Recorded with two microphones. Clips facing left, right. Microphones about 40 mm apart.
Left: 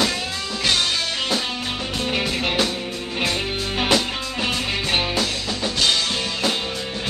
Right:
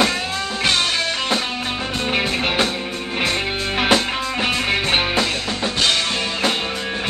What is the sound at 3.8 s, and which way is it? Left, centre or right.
Music, right.